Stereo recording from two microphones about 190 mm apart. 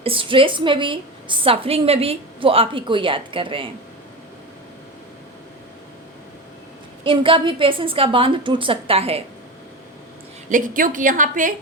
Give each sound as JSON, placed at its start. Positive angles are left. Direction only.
{"t": 0.0, "sound": "a woman's voice", "side_deg": -30}
{"t": 7.0, "sound": "a woman's voice", "side_deg": -25}
{"t": 10.5, "sound": "a woman's voice", "side_deg": -45}